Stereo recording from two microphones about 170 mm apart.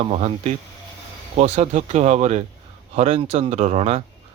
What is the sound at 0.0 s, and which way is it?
Speech, 40° right (ahead or behind).